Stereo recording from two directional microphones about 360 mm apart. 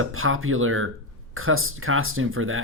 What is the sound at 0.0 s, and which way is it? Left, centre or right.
Speech, right.